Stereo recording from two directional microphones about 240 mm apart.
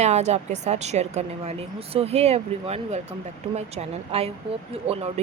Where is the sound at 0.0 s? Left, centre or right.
Right.